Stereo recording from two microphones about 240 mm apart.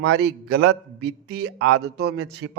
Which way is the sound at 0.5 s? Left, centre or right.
Right.